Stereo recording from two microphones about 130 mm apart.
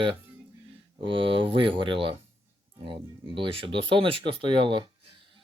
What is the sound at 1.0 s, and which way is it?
Speech, 40° right (ahead or behind).